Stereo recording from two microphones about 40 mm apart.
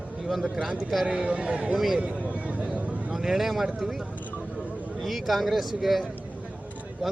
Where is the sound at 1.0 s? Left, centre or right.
Right.